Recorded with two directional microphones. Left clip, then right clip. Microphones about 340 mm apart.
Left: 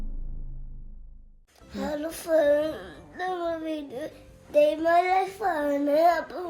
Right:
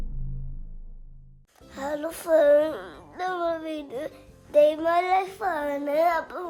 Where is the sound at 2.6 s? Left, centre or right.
Centre.